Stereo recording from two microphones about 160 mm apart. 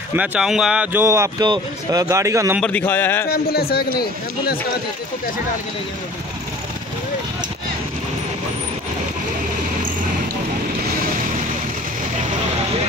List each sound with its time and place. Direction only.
0.1 s speech: 10° right (ahead or behind)
1.0 s a man's voice: 20° right (ahead or behind)
2.6 s speech: 10° left (ahead or behind)
3.3 s a man's voice: 75° left (ahead or behind)